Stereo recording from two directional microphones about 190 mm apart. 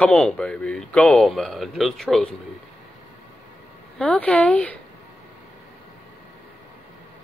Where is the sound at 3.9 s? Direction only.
5° left (ahead or behind).